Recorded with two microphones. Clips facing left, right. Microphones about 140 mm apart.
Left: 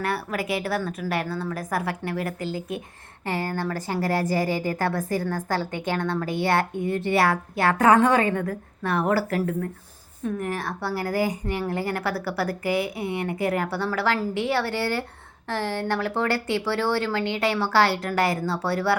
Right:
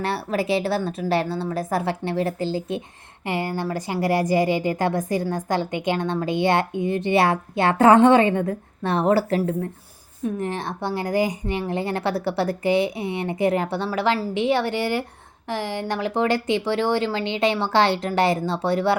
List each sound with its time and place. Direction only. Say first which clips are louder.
0.0 s a woman's voice: right 3 dB; 30° right (ahead or behind)